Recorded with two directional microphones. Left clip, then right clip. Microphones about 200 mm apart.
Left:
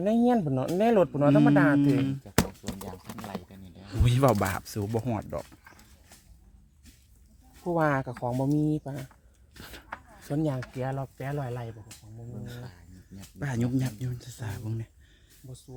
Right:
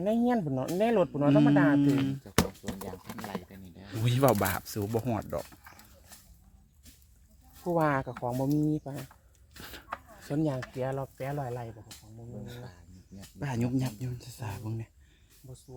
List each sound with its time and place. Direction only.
0.0 s speech: 55° left (ahead or behind)
2.9 s a sound: 30° left (ahead or behind)
3.9 s speech: 15° left (ahead or behind)
4.9 s speech: centre (ahead or behind)
7.6 s speech: 40° left (ahead or behind)
9.6 s a sound: 10° left (ahead or behind)
10.2 s speech: 50° left (ahead or behind)
13.4 s speech: 15° left (ahead or behind)